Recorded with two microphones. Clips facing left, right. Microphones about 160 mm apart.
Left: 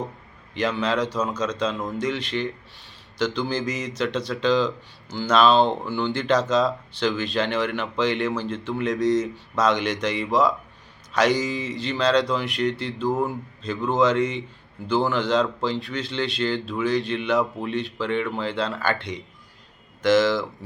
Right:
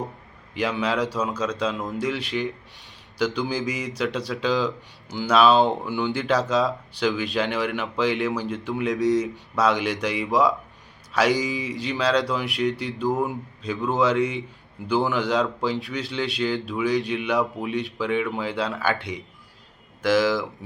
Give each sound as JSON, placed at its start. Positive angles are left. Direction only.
{"t": 0.5, "sound": "a man's voice", "side_deg": -10}